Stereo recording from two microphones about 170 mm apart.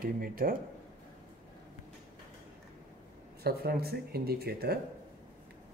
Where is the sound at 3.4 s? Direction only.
65° right (ahead or behind).